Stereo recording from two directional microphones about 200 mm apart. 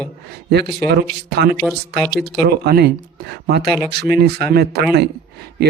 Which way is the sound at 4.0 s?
55° right (ahead or behind).